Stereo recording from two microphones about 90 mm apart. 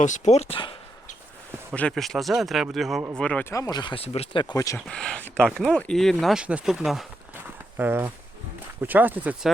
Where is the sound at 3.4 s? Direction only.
35° left (ahead or behind).